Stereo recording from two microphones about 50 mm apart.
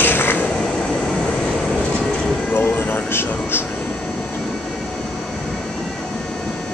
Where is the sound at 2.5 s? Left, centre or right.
Left.